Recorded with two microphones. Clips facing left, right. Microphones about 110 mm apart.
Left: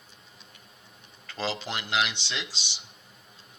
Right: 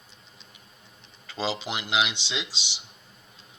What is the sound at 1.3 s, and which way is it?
Speech, 15° right (ahead or behind).